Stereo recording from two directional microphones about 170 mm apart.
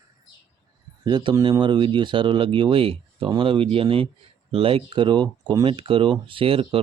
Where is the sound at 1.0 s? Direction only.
25° right (ahead or behind).